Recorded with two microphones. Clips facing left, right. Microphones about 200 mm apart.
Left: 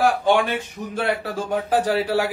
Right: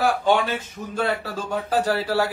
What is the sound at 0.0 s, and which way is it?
A man's voice, 10° left (ahead or behind).